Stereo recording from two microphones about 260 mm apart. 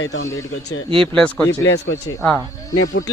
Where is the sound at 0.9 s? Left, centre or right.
Centre.